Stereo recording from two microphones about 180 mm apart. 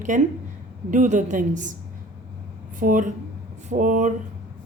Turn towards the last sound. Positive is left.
turn(degrees=-45)  # may be behind; listen again after turning